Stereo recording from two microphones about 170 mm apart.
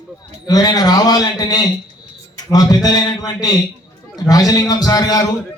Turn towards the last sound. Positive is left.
turn(degrees=20)  # may be behind; listen again after turning